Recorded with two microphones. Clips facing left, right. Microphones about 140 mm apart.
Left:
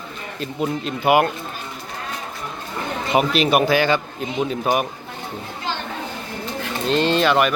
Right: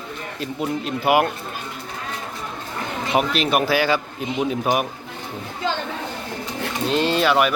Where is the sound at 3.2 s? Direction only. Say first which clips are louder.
Left 3 dB; centre (ahead or behind).